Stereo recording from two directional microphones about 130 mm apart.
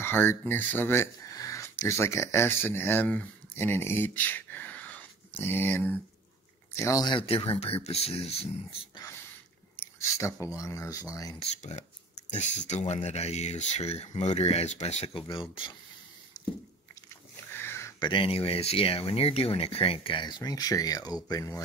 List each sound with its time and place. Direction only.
0.0 s speech: 15° left (ahead or behind)
7.2 s speech: 45° left (ahead or behind)
9.8 s a sound: 20° left (ahead or behind)
10.4 s speech: 25° left (ahead or behind)
12.3 s speech: 65° left (ahead or behind)
15.5 s speech: 40° left (ahead or behind)
16.3 s a sound: 30° left (ahead or behind)
17.6 s a sound: 20° left (ahead or behind)
18.0 s speech: 40° left (ahead or behind)